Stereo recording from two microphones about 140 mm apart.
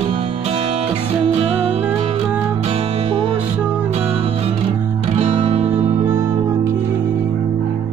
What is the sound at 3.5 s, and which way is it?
Music, 10° right (ahead or behind).